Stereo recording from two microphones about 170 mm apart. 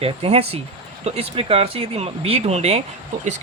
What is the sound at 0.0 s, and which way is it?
Speech, 35° right (ahead or behind).